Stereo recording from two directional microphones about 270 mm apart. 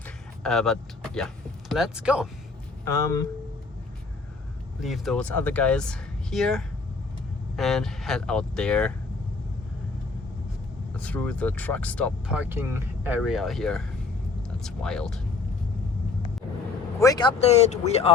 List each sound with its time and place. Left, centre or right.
0.4 s speech: centre
2.8 s speech: centre
4.8 s speech: centre
10.9 s speech: centre
17.0 s speech: centre